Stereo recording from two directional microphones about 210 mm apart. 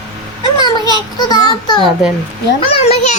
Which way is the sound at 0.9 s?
20° left (ahead or behind).